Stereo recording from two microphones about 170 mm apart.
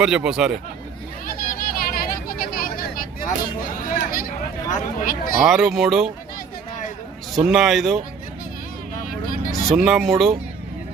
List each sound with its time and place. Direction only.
0.0 s speech: 5° right (ahead or behind)
1.3 s vehicle: 60° left (ahead or behind)
4.7 s speech: 50° left (ahead or behind)
5.4 s speech: centre (ahead or behind)
7.3 s speech: centre (ahead or behind)
9.6 s speech: centre (ahead or behind)